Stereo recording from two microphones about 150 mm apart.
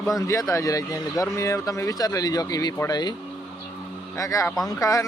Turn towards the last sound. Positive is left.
turn(degrees=20)  # may be behind; listen again after turning